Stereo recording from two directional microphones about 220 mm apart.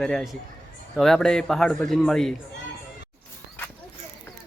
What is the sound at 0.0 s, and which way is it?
Speech, 5° left (ahead or behind).